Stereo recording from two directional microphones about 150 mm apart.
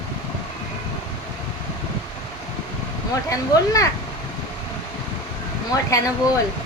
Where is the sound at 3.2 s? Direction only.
20° left (ahead or behind).